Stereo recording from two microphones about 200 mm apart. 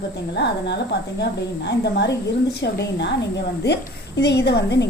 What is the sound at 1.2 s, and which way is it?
A woman's voice, 55° left (ahead or behind).